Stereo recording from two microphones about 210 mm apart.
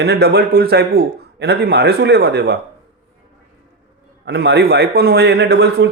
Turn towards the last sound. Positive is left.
turn(degrees=-50)  # may be behind; listen again after turning